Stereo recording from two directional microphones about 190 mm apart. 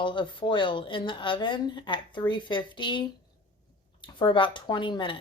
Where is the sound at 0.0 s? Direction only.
25° left (ahead or behind).